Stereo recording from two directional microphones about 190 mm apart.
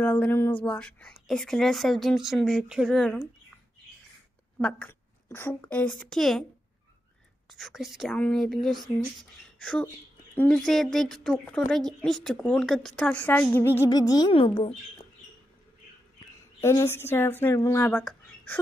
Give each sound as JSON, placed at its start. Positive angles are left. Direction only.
{"t": 0.0, "sound": "speech", "side_deg": 10}
{"t": 4.6, "sound": "a woman's voice", "side_deg": 5}
{"t": 7.4, "sound": "speech", "side_deg": 0}
{"t": 16.6, "sound": "speech", "side_deg": 15}